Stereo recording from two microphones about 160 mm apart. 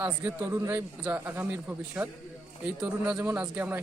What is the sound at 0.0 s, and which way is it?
A man's voice, 15° right (ahead or behind).